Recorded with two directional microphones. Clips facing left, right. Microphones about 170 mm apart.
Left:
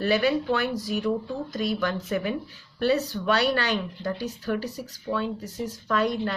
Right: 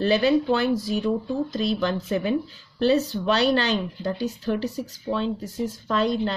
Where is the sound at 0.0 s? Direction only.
25° right (ahead or behind).